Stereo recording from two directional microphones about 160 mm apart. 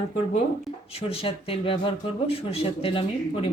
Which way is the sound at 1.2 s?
35° left (ahead or behind).